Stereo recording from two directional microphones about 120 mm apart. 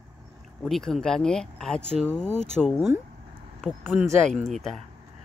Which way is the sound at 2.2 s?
70° left (ahead or behind).